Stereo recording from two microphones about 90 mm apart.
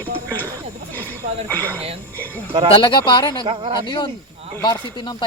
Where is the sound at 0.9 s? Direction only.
20° left (ahead or behind).